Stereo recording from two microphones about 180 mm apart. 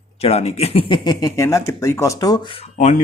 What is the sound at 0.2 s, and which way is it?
Speech, 35° left (ahead or behind).